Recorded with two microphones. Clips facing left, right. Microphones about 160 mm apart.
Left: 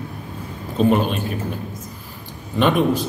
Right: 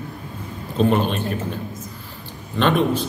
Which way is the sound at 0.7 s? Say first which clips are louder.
Left 1 dB; 5° left (ahead or behind).